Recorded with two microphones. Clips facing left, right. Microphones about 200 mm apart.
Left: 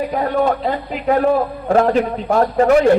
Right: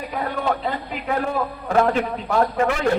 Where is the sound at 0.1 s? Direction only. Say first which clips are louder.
Left 4 dB; 40° left (ahead or behind).